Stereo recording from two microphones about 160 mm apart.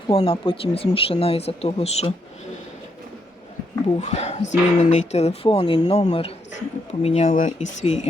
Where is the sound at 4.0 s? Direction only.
45° left (ahead or behind).